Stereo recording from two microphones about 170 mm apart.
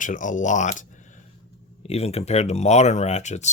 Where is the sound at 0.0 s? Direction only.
50° left (ahead or behind).